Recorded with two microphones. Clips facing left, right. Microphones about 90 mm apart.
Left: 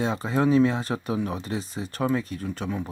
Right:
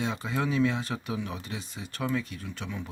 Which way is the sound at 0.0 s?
35° left (ahead or behind).